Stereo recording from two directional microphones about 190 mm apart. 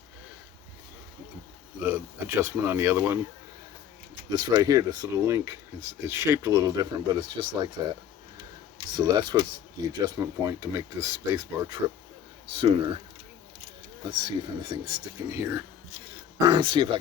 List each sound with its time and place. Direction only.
1.8 s speech: 10° right (ahead or behind)
4.3 s speech: 20° right (ahead or behind)
14.0 s speech: 25° right (ahead or behind)